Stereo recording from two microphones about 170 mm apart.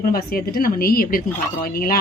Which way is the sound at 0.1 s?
60° left (ahead or behind).